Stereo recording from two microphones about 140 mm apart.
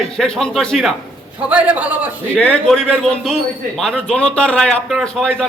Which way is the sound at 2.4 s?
5° left (ahead or behind).